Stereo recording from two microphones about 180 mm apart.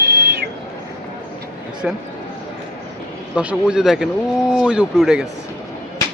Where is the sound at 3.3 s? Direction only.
5° right (ahead or behind).